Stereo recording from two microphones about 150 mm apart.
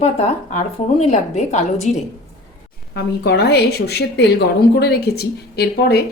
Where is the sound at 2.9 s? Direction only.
90° left.